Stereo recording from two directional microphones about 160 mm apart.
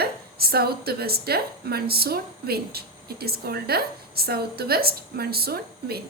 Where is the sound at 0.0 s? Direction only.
75° right (ahead or behind).